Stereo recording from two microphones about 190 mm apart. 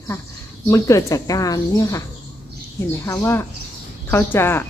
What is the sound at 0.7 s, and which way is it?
A woman's voice, 15° left (ahead or behind).